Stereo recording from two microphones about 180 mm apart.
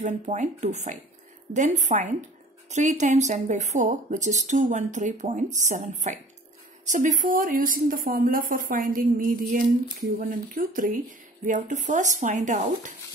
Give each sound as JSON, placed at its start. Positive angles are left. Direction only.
{"t": 0.0, "sound": "speech", "side_deg": -40}